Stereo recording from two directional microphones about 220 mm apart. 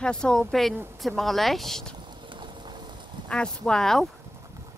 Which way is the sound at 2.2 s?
20° right (ahead or behind).